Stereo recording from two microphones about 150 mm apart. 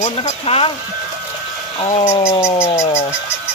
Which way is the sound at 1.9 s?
40° left (ahead or behind).